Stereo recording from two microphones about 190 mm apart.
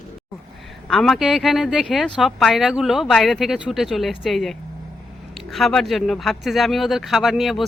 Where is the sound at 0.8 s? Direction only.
Centre (ahead or behind).